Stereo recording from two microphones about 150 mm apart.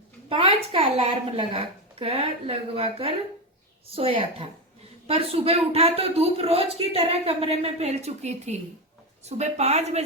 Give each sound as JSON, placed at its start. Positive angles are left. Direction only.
{"t": 0.3, "sound": "a woman's voice", "side_deg": -40}